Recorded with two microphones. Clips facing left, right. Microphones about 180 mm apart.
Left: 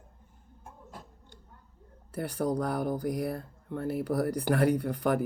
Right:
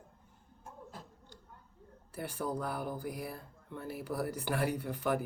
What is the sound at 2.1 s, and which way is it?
Speech, 45° left (ahead or behind).